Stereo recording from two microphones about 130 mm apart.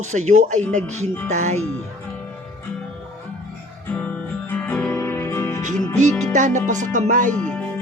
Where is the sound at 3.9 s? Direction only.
10° left (ahead or behind).